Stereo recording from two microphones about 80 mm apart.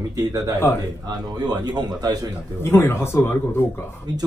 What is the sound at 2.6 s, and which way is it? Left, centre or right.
Speech, left.